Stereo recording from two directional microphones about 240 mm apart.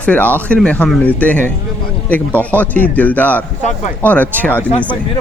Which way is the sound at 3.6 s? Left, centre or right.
Left.